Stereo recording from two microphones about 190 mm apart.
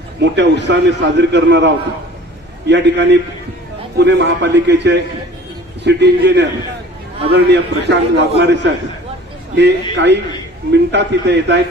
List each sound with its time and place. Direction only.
0.2 s a man's voice: 65° right (ahead or behind)